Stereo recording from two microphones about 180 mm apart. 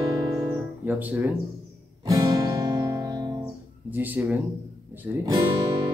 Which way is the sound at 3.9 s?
10° right (ahead or behind).